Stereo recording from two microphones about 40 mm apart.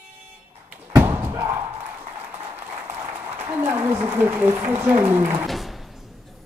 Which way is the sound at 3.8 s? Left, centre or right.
Right.